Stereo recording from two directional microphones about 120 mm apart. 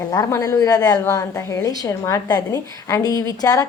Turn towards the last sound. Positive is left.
turn(degrees=30)  # may be behind; listen again after turning